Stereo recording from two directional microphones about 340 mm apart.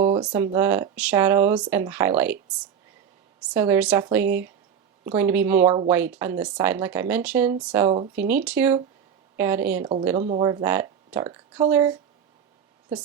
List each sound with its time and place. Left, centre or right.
0.0 s speech: centre
3.4 s speech: centre
5.6 s speech: centre
5.9 s speech: centre
10.2 s speech: centre